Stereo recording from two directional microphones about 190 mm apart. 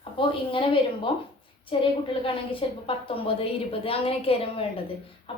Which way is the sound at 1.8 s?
25° left (ahead or behind).